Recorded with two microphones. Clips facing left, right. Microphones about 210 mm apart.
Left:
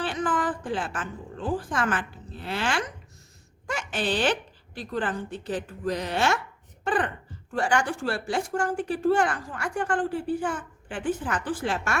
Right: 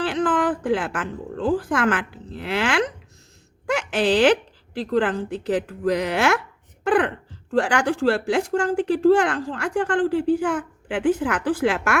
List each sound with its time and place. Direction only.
0.0 s a woman's voice: 90° right